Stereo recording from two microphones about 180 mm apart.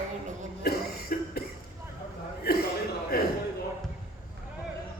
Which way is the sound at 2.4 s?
60° left (ahead or behind).